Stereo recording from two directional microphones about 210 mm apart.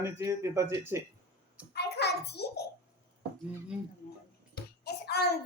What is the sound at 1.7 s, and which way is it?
Hands, 50° left (ahead or behind).